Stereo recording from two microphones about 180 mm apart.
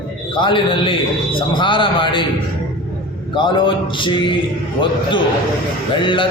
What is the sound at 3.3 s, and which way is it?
A man's voice, 25° left (ahead or behind).